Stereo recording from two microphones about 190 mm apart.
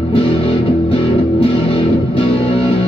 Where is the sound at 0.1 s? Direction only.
30° left (ahead or behind).